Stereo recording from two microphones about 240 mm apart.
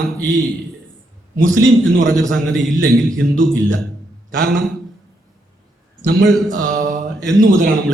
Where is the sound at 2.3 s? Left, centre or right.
Centre.